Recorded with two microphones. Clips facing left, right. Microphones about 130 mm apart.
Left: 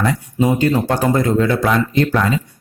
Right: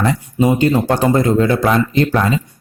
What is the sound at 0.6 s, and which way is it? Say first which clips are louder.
A man's voice: right 2 dB; 20° right (ahead or behind).